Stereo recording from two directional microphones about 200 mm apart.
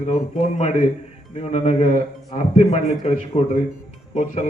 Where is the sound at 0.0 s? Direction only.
35° left (ahead or behind).